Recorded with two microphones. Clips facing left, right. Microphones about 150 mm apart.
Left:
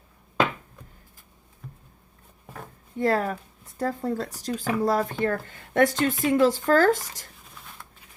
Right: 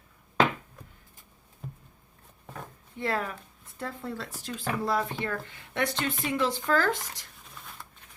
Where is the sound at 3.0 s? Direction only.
40° left (ahead or behind).